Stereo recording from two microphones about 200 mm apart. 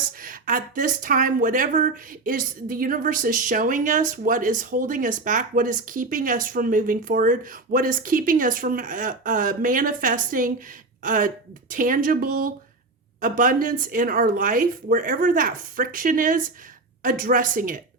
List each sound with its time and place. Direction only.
0.2 s speech: 45° right (ahead or behind)